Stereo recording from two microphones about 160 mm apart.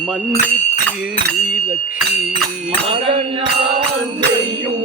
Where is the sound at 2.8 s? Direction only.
40° right (ahead or behind).